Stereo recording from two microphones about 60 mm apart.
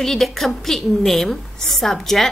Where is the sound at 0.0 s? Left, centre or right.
Centre.